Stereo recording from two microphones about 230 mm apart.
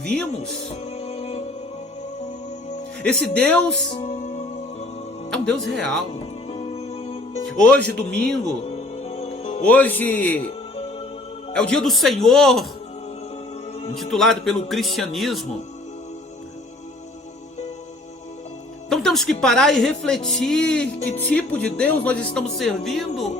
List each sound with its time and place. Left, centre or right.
0.9 s music: left
3.0 s speech: centre
3.8 s music: left
5.3 s speech: centre
6.5 s music: left
7.9 s speech: centre
8.4 s music: left
9.6 s speech: centre
11.5 s speech: centre
13.9 s speech: centre
18.9 s speech: centre